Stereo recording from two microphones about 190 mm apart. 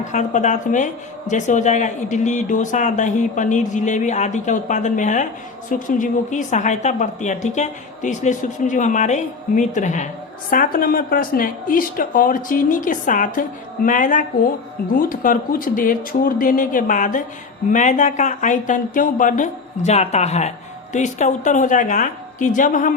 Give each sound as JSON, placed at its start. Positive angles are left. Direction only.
{"t": 0.1, "sound": "speech", "side_deg": 40}